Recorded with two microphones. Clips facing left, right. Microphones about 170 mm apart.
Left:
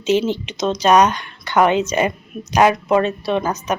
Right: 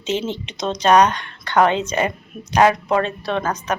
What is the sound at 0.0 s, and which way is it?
Speech, 25° right (ahead or behind).